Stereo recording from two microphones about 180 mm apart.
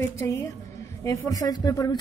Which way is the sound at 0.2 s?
15° left (ahead or behind).